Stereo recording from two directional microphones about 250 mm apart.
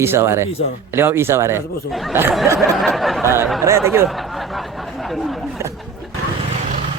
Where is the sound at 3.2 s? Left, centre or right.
Centre.